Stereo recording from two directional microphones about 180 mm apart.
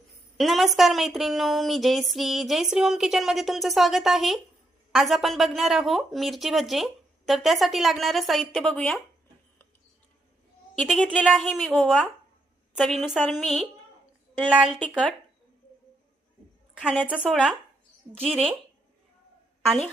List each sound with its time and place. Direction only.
0.3 s a woman's voice: centre (ahead or behind)
10.8 s a woman's voice: 5° left (ahead or behind)
16.7 s a woman's voice: 5° right (ahead or behind)
18.2 s speech: 35° right (ahead or behind)